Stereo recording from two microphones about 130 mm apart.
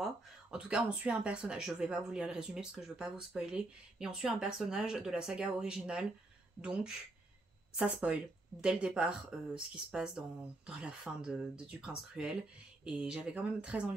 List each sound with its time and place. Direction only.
0.0 s speech: 5° right (ahead or behind)